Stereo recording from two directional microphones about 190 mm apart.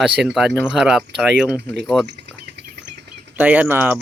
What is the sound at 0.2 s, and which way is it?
Speech, 5° right (ahead or behind).